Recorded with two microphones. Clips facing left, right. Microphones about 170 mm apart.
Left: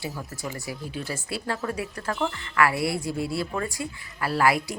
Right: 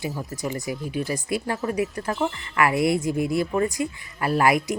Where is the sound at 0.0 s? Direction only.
20° right (ahead or behind).